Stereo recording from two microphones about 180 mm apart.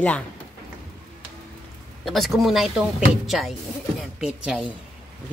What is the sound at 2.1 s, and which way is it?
Speech, centre (ahead or behind).